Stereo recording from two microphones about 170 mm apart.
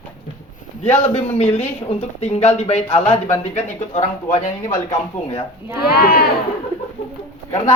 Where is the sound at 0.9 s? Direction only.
40° left (ahead or behind).